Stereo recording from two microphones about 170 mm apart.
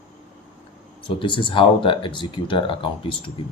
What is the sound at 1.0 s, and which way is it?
Speech, 30° left (ahead or behind).